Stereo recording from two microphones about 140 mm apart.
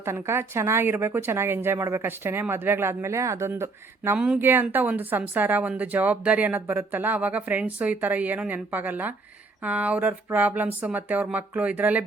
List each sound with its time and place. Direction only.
0.0 s speech: 20° right (ahead or behind)